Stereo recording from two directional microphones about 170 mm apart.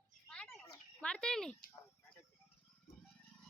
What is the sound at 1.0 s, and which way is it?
Speech, 5° left (ahead or behind).